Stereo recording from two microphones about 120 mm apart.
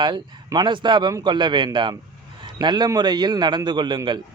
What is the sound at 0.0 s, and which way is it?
Speech, 40° right (ahead or behind).